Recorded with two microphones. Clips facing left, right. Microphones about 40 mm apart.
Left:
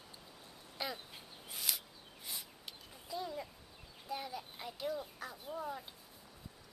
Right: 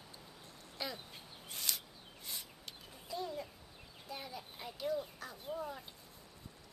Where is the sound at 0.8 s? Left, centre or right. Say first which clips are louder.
Left 1 dB; centre.